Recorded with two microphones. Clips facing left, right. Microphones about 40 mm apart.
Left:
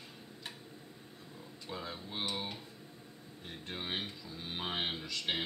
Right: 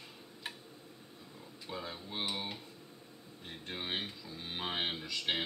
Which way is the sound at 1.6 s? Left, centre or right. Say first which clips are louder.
Even; centre.